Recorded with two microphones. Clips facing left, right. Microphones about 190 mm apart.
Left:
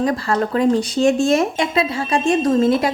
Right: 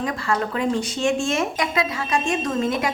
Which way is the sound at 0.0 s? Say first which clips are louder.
Left 5 dB; 35° left (ahead or behind).